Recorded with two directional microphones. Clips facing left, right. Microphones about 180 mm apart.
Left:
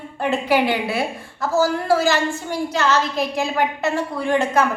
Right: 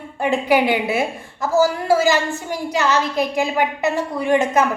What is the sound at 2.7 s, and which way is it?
A woman's voice, 15° right (ahead or behind).